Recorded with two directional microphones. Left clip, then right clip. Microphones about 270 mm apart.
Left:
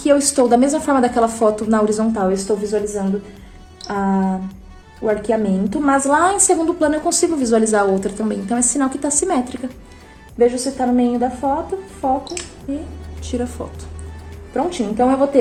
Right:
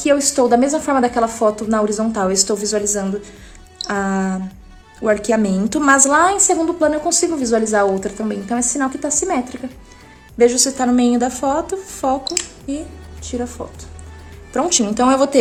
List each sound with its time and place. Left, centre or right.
0.0 s a woman's voice: centre
2.2 s a woman's voice: right
6.1 s a woman's voice: centre
10.3 s a woman's voice: right
13.2 s a woman's voice: centre
14.5 s a woman's voice: right